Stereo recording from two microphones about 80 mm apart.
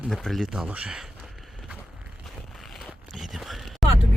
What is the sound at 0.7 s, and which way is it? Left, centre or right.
Speech, centre.